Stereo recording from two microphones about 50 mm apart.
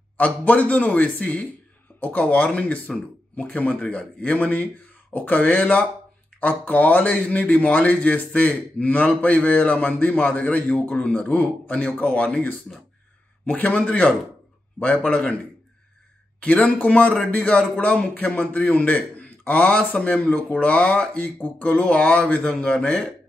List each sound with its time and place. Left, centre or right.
0.2 s speech: left
16.7 s speech: left
17.1 s speech: centre
17.5 s a man's voice: left
21.4 s speech: left; by 23.0 s centre